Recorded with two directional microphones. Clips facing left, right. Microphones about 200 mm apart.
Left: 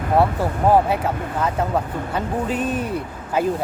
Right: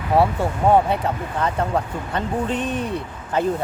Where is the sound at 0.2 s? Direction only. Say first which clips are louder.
Even; centre (ahead or behind).